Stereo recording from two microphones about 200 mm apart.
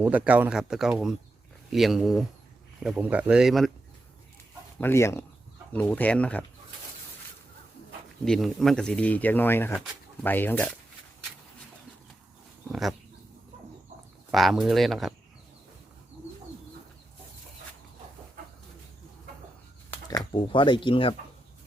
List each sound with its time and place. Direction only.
0.0 s speech: 5° right (ahead or behind)
4.8 s speech: 10° left (ahead or behind)
8.2 s speech: centre (ahead or behind)
14.3 s speech: centre (ahead or behind)
19.9 s speech: 20° left (ahead or behind)